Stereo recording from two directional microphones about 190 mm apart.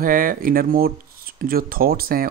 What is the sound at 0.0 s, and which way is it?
Speech, 45° right (ahead or behind).